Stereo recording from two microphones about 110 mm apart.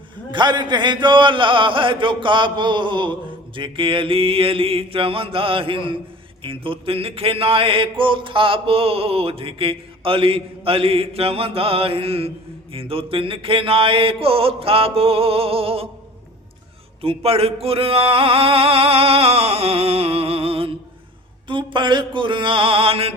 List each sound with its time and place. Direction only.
0.3 s chant: 45° right (ahead or behind)
3.5 s mantra: 50° right (ahead or behind)
17.0 s mantra: 65° right (ahead or behind)
21.4 s chant: 50° right (ahead or behind)